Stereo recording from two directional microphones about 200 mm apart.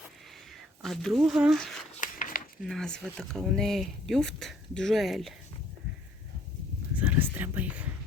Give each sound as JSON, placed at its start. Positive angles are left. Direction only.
{"t": 0.5, "sound": "speech", "side_deg": 0}
{"t": 2.0, "sound": "a sound", "side_deg": 45}
{"t": 2.6, "sound": "speech", "side_deg": 0}
{"t": 6.9, "sound": "whispering", "side_deg": -10}